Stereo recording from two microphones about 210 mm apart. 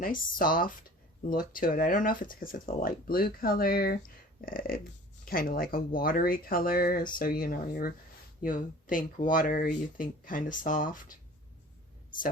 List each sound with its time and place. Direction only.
0.0 s speech: 40° left (ahead or behind)